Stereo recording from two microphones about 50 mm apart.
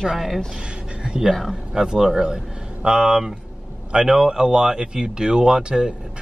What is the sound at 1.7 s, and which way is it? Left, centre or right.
Speech, centre.